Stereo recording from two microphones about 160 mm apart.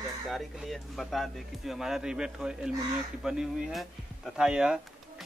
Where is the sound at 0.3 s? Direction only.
Centre (ahead or behind).